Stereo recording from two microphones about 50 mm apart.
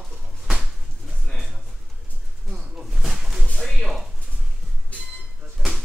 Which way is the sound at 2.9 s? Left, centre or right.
Centre.